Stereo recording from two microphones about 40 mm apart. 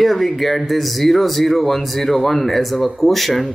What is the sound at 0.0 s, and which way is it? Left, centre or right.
Speech, centre.